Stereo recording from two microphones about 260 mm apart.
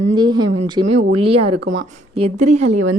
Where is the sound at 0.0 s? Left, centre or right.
Centre.